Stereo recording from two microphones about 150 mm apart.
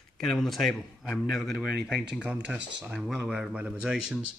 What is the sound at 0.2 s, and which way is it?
Speech, centre (ahead or behind).